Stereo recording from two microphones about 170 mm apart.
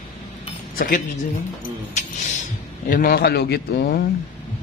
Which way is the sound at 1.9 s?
45° left (ahead or behind).